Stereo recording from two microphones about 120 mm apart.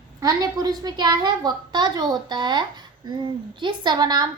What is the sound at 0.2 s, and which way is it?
A child's voice, 30° right (ahead or behind).